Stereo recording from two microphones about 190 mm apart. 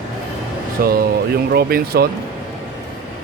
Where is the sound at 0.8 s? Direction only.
50° right (ahead or behind).